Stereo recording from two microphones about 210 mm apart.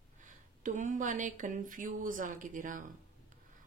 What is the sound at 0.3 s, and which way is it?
Speech, 35° right (ahead or behind).